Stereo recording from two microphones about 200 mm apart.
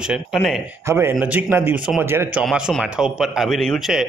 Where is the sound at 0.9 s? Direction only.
10° right (ahead or behind).